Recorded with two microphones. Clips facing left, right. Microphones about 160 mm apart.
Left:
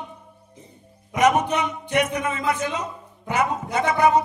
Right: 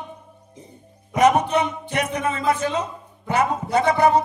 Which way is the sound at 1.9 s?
30° right (ahead or behind).